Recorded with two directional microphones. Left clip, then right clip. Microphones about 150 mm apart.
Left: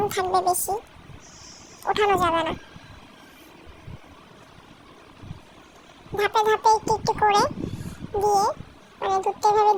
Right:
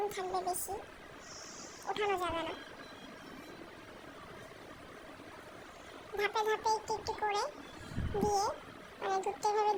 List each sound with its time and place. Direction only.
0.1 s a child's voice: 40° left (ahead or behind)
1.9 s a child's voice: 35° left (ahead or behind)
6.1 s a child's voice: 25° left (ahead or behind)
8.2 s speech: 25° left (ahead or behind)